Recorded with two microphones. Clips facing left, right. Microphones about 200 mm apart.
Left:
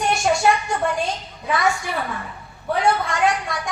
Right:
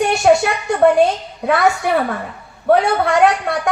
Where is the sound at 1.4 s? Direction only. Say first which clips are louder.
Right 7 dB; 65° right (ahead or behind).